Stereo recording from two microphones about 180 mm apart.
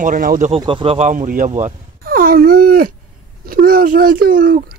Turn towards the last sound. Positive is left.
turn(degrees=-50)  # may be behind; listen again after turning